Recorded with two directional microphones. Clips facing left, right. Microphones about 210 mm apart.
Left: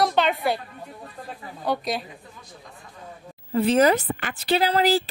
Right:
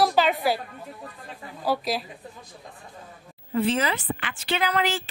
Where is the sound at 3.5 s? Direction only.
40° left (ahead or behind).